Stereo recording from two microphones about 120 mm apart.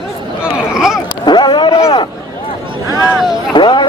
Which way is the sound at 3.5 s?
40° left (ahead or behind).